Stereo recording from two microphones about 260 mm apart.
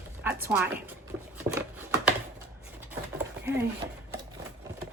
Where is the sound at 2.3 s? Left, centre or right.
Centre.